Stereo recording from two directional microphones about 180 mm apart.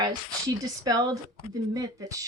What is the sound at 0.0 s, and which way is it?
A woman's voice, 20° right (ahead or behind).